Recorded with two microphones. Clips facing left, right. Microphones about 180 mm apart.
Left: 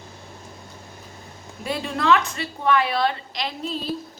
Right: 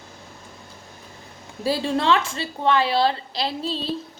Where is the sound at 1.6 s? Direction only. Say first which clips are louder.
Right 3 dB; 30° right (ahead or behind).